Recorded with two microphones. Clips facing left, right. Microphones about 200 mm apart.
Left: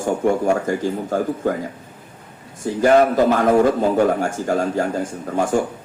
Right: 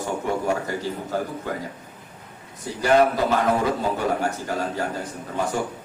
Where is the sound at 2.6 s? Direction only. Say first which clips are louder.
Left 4 dB; 50° left (ahead or behind).